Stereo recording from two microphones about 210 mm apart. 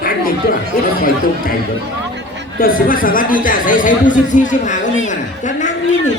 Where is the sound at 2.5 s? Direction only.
40° left (ahead or behind).